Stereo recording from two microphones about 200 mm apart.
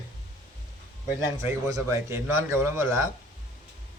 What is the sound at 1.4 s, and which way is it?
A man's voice, 15° right (ahead or behind).